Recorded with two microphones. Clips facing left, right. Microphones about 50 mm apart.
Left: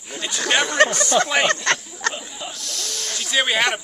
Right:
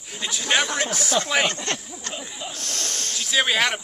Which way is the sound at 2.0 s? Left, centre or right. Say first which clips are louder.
Left 11 dB; left.